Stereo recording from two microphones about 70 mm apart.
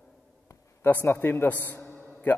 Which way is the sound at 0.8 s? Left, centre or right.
Left.